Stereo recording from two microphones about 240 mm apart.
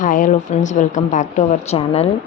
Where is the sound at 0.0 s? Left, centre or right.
Left.